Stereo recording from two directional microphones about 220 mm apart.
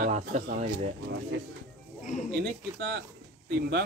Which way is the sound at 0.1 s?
30° right (ahead or behind).